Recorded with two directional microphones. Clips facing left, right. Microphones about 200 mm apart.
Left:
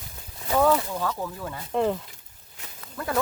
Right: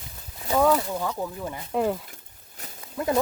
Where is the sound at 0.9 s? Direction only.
15° right (ahead or behind).